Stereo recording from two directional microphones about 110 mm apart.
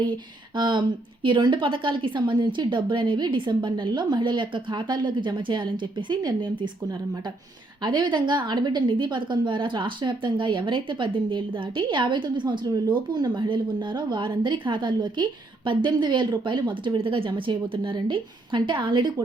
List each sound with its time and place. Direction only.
0.5 s a woman's voice: 45° right (ahead or behind)
7.8 s a woman's voice: 45° right (ahead or behind)